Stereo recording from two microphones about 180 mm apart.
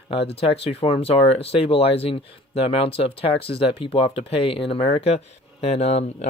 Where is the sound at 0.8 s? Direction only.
35° left (ahead or behind).